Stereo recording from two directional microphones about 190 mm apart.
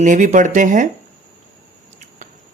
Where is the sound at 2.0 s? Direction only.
40° right (ahead or behind).